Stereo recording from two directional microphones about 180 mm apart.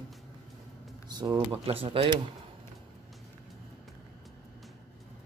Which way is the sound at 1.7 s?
30° right (ahead or behind).